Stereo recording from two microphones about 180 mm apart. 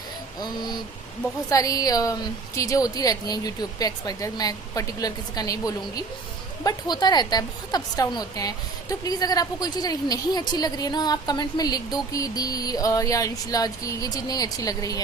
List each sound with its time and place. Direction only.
0.3 s a woman's voice: 20° left (ahead or behind)